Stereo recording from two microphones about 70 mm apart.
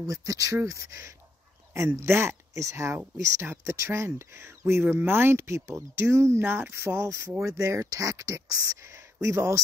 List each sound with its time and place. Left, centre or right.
0.0 s speech: right